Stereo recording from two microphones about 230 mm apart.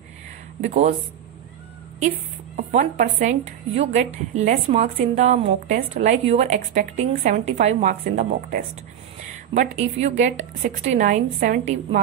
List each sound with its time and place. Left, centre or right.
0.6 s a woman's voice: right
2.5 s a woman's voice: right